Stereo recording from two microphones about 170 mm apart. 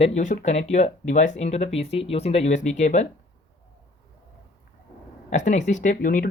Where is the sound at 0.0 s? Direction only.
45° left (ahead or behind).